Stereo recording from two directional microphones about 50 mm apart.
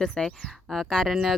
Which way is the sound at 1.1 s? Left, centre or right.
Centre.